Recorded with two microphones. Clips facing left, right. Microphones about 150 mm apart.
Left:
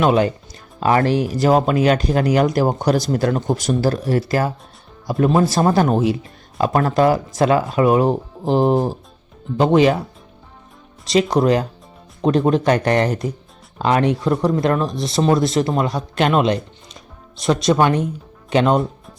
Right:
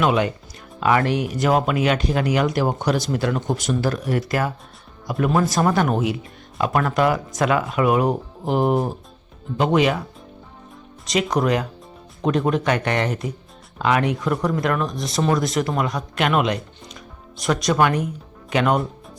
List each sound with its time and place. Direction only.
0.0 s speech: 35° left (ahead or behind)
11.0 s speech: 30° left (ahead or behind)